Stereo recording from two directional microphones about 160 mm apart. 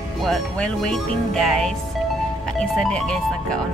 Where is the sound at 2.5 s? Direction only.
5° left (ahead or behind).